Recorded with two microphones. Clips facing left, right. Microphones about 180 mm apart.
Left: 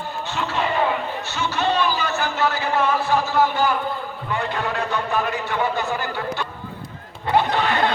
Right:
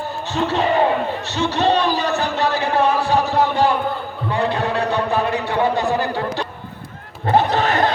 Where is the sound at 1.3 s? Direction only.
35° right (ahead or behind).